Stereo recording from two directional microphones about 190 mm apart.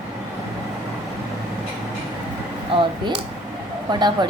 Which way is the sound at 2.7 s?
25° right (ahead or behind).